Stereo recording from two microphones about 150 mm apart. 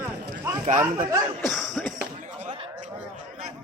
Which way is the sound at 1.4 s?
Centre (ahead or behind).